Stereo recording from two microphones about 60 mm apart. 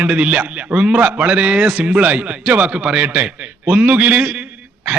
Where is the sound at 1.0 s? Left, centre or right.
Right.